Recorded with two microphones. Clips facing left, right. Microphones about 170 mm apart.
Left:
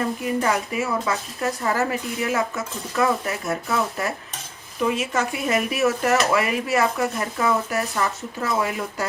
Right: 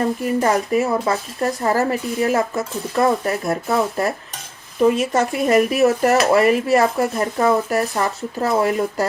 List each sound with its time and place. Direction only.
0.3 s speech: 35° right (ahead or behind)